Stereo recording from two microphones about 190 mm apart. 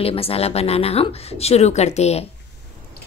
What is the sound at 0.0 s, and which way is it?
A woman's voice, 30° left (ahead or behind).